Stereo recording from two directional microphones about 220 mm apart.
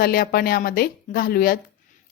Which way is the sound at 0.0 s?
45° left (ahead or behind).